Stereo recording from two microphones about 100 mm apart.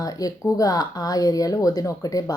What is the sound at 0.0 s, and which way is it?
Speech, 35° left (ahead or behind).